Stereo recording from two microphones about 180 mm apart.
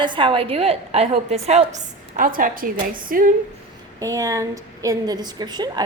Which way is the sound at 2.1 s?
50° right (ahead or behind).